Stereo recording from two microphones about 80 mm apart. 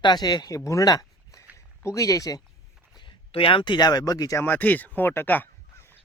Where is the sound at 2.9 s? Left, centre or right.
Left.